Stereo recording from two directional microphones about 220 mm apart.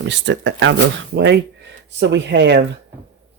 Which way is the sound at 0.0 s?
55° right (ahead or behind).